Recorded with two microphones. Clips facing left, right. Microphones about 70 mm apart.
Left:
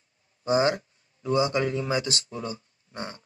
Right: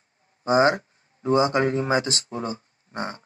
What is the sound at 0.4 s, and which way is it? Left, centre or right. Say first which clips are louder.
Speech: right 4 dB; right.